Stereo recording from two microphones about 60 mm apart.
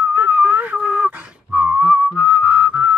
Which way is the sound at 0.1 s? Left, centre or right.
Right.